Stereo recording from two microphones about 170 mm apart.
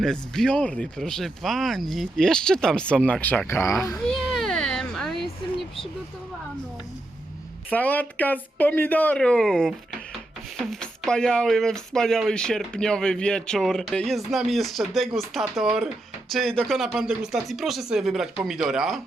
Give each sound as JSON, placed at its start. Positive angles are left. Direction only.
{"t": 0.0, "sound": "speech", "side_deg": 5}
{"t": 4.0, "sound": "a sound", "side_deg": 0}
{"t": 7.7, "sound": "speech", "side_deg": 10}